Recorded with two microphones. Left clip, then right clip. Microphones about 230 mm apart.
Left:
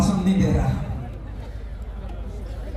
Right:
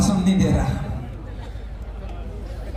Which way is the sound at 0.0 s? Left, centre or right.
Right.